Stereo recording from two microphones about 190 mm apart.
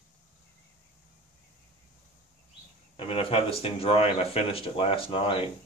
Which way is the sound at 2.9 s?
30° left (ahead or behind).